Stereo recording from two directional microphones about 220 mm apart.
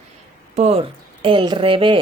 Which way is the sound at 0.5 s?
30° right (ahead or behind).